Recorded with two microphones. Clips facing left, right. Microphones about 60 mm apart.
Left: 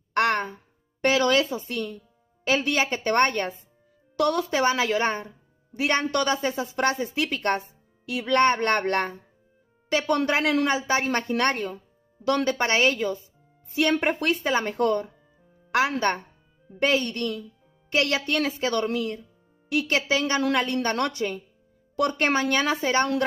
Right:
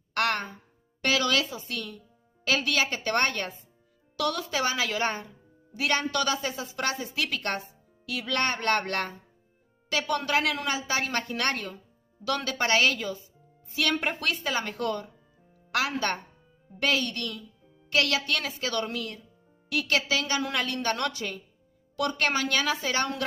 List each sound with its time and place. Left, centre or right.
0.1 s a woman's voice: left